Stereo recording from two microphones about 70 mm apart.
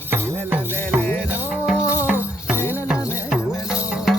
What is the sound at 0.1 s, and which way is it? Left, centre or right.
Music, right.